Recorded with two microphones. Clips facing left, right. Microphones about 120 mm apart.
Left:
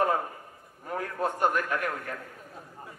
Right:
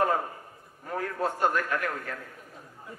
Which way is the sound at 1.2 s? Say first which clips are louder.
Even; 15° left (ahead or behind).